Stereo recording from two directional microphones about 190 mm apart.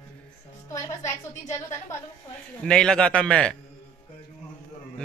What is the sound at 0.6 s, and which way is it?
Speech, 15° left (ahead or behind).